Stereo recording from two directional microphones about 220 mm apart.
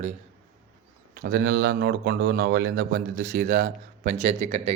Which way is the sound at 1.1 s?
40° right (ahead or behind).